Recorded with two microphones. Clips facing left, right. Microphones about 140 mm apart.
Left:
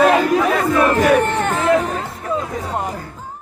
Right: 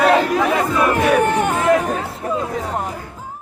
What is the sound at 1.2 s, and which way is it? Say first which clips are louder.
Chatter: right 1 dB; 10° right (ahead or behind).